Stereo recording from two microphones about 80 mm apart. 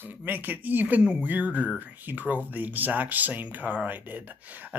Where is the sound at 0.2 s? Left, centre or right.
Right.